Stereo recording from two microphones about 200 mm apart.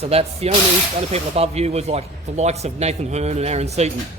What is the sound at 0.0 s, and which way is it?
Speech, 30° right (ahead or behind).